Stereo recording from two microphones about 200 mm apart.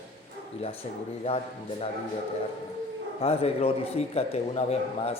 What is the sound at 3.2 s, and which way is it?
A man's voice, 30° left (ahead or behind).